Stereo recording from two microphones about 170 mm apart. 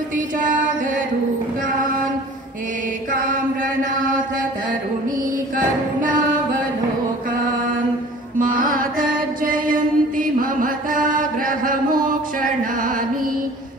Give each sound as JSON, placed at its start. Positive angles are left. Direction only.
{"t": 8.4, "sound": "music", "side_deg": -55}
{"t": 9.4, "sound": "chant", "side_deg": -55}